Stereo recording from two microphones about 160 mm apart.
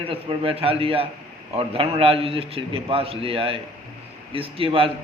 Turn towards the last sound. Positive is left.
turn(degrees=-35)  # may be behind; listen again after turning